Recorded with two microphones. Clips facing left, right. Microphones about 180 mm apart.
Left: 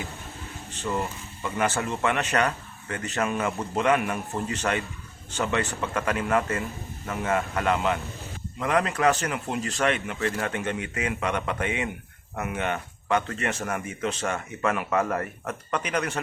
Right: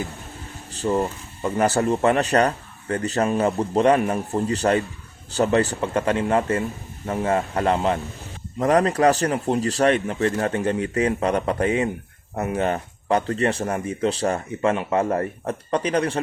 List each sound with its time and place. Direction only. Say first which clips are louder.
0.7 s speech: right 7 dB; 35° right (ahead or behind)